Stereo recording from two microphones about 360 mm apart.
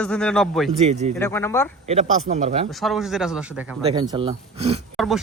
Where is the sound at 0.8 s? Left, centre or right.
Centre.